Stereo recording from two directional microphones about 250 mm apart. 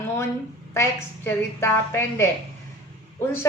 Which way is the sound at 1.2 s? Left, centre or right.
Centre.